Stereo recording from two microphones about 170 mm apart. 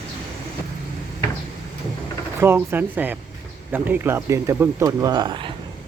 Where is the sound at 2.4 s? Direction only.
15° right (ahead or behind).